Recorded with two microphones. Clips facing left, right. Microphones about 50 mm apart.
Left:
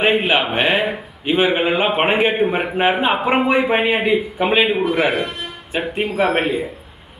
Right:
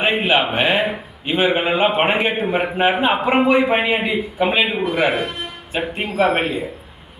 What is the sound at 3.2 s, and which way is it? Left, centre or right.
Speech, centre.